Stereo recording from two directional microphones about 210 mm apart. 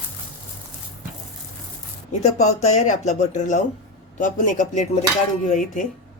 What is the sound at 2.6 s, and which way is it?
Speech, 35° left (ahead or behind).